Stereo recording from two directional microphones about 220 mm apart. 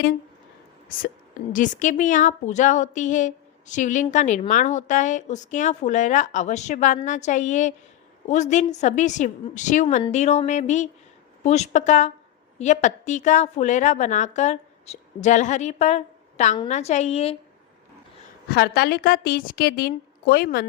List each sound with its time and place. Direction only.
1.5 s a woman's voice: 35° left (ahead or behind)
18.4 s a woman's voice: 45° left (ahead or behind)